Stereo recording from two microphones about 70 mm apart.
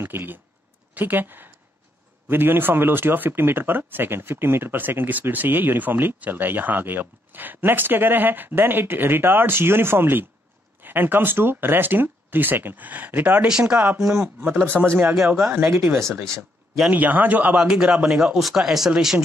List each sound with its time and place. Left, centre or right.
0.0 s a man's voice: right
13.5 s a man's voice: centre
14.1 s a man's voice: right
15.0 s a man's voice: centre
16.9 s a man's voice: right; by 19.1 s centre